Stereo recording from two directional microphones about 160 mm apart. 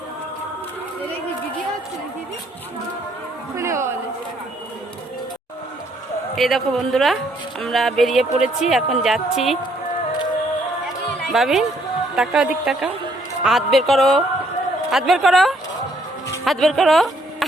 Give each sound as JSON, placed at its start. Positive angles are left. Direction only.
{"t": 3.5, "sound": "a sound", "side_deg": -15}
{"t": 6.3, "sound": "speech", "side_deg": 0}
{"t": 11.3, "sound": "speech", "side_deg": 0}